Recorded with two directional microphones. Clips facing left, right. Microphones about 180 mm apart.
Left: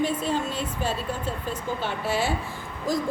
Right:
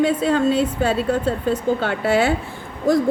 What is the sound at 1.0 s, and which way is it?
A woman's voice, 65° right (ahead or behind).